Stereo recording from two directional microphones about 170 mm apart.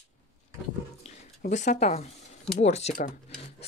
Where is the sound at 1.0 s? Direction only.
45° left (ahead or behind).